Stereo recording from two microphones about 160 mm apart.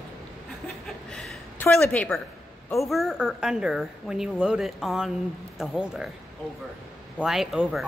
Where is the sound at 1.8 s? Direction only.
10° left (ahead or behind).